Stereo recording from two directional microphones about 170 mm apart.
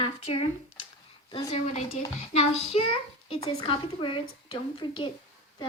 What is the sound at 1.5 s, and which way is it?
A woman's voice, 40° left (ahead or behind).